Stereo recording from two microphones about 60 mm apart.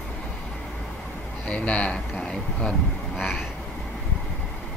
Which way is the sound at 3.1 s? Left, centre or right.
Centre.